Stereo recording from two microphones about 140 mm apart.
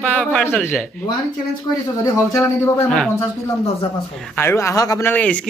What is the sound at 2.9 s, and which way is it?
Speech, 5° left (ahead or behind).